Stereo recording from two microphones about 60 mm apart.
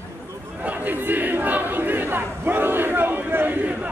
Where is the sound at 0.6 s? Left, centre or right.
Right.